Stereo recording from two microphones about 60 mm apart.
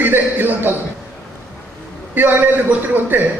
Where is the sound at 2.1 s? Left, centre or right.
Right.